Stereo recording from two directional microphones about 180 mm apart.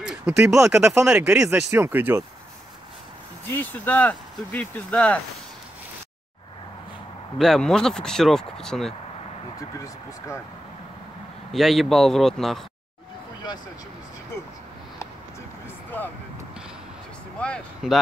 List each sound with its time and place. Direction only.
0.0 s speech: 5° right (ahead or behind)
3.4 s speech: 10° left (ahead or behind)
7.3 s speech: centre (ahead or behind)
9.6 s speech: 15° left (ahead or behind)
11.5 s speech: centre (ahead or behind)
17.4 s speech: 5° left (ahead or behind)